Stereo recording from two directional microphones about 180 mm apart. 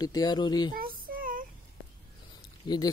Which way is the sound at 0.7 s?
55° right (ahead or behind).